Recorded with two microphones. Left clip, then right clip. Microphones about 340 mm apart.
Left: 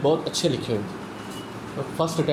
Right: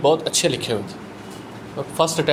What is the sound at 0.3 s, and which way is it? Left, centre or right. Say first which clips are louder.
Speech: right 4 dB; right.